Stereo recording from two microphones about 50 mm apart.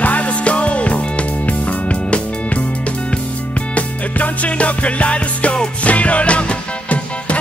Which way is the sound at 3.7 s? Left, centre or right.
Left.